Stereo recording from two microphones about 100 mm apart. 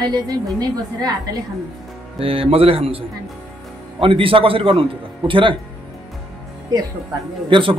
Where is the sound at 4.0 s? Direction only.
60° right (ahead or behind).